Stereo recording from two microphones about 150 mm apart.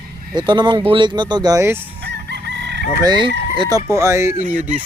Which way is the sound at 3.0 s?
30° right (ahead or behind).